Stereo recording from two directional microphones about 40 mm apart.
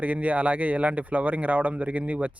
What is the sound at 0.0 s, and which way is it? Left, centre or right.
Speech, right.